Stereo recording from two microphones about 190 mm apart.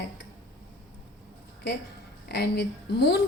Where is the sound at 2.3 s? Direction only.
60° left (ahead or behind).